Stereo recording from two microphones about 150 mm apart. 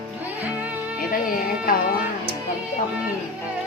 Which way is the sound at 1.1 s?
70° left (ahead or behind).